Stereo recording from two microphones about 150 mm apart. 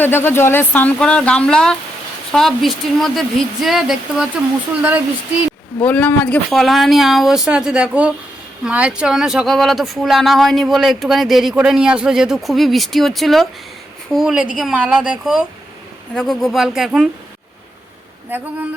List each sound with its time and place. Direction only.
0.0 s speech: 15° left (ahead or behind); by 4.3 s centre (ahead or behind)
5.8 s speech: 10° left (ahead or behind)
18.3 s speech: 15° right (ahead or behind)